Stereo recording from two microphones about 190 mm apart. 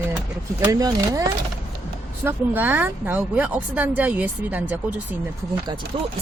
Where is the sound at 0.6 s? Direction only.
20° right (ahead or behind).